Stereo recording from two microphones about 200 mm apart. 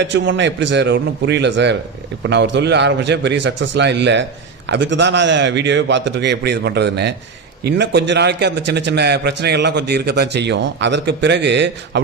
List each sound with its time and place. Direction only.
0.0 s a man's voice: 65° right (ahead or behind)